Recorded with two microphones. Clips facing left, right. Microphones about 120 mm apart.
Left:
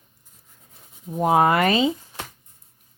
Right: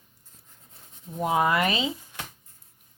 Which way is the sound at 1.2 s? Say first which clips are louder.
Left 5 dB; 55° left (ahead or behind).